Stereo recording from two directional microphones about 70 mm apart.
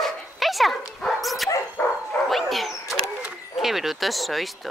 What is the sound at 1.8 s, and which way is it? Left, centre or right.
Dog, left.